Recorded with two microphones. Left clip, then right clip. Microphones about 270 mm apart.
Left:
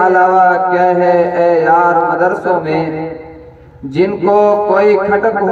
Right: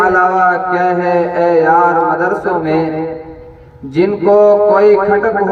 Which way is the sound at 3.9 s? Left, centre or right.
Left.